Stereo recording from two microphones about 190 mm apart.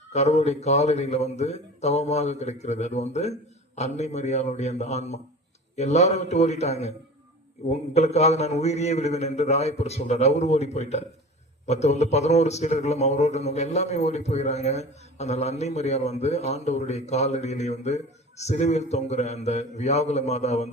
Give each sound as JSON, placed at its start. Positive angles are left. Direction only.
{"t": 0.1, "sound": "a man's voice", "side_deg": 35}